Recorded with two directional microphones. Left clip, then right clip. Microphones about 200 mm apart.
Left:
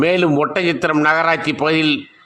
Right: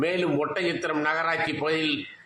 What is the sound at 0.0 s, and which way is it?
A man's voice, 50° left (ahead or behind).